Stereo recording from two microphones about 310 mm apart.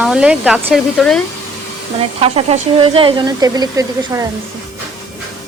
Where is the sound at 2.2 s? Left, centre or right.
Centre.